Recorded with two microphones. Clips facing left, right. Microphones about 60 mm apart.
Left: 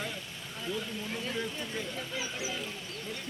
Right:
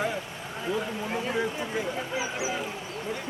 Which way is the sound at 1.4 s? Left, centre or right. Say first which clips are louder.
Right 7 dB; centre.